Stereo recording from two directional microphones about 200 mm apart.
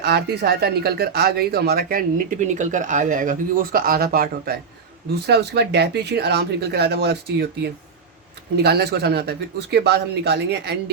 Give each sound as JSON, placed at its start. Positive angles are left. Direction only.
{"t": 0.0, "sound": "speech", "side_deg": -55}